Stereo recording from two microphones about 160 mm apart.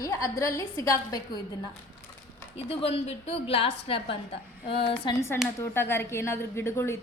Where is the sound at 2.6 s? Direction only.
40° left (ahead or behind).